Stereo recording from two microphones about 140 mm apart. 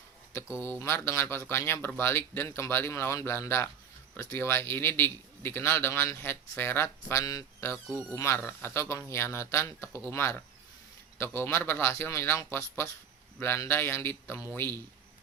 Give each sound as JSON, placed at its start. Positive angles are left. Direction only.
{"t": 0.6, "sound": "a man's voice", "side_deg": 20}